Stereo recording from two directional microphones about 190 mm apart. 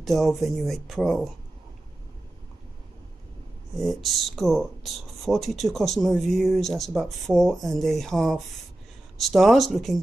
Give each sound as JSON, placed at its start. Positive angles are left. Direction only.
{"t": 0.0, "sound": "speech", "side_deg": 0}
{"t": 3.8, "sound": "speech", "side_deg": 0}